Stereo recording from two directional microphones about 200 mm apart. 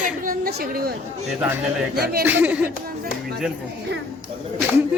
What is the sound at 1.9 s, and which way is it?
Speech, 50° right (ahead or behind).